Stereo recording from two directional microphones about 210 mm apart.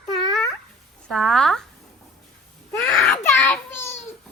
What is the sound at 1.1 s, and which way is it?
Speech, 5° left (ahead or behind).